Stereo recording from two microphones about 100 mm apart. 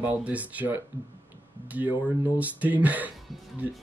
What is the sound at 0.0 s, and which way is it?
Speech, 15° right (ahead or behind).